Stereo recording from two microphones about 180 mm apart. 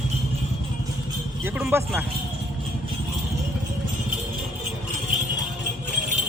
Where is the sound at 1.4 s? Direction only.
15° right (ahead or behind).